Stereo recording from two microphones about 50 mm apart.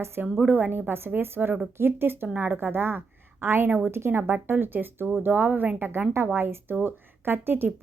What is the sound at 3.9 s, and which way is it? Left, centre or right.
A woman's voice, right.